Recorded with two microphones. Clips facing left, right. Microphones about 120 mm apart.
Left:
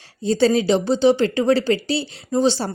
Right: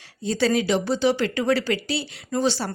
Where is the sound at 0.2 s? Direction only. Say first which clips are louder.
Left 5 dB; 30° left (ahead or behind).